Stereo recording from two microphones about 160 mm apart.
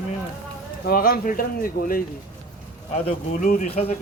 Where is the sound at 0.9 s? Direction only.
65° left (ahead or behind).